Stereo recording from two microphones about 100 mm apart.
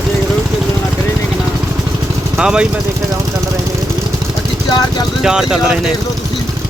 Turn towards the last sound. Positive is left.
turn(degrees=-10)  # may be behind; listen again after turning